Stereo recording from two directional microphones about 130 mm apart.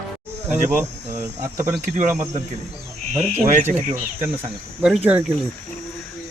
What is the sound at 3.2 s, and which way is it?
Speech, 60° right (ahead or behind).